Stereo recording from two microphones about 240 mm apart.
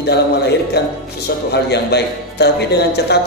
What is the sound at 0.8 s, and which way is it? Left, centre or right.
A man's voice, left.